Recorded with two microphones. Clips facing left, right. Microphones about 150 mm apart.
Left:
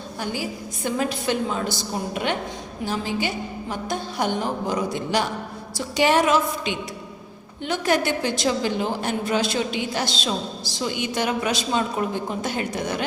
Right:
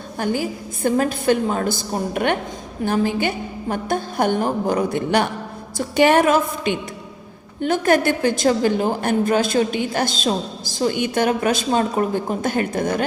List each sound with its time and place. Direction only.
0.2 s a woman's voice: 50° right (ahead or behind)